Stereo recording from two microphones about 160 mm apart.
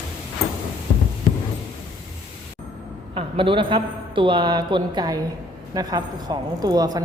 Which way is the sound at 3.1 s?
35° right (ahead or behind).